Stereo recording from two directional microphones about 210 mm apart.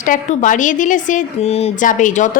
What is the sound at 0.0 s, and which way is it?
Speech, 40° left (ahead or behind).